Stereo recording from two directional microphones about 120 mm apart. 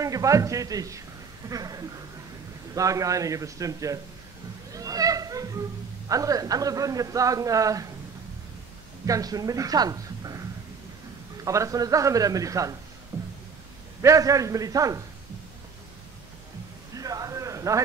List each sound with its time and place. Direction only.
0.0 s a man's voice: 25° right (ahead or behind)
4.7 s a sound: 30° right (ahead or behind)
6.0 s a man's voice: 30° right (ahead or behind)
9.0 s a woman's voice: 30° right (ahead or behind)
11.4 s a man's voice: 25° right (ahead or behind)
14.0 s a man's voice: 25° right (ahead or behind)
16.9 s a sound: 30° right (ahead or behind)